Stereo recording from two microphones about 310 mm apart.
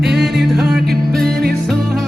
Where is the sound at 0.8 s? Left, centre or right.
Right.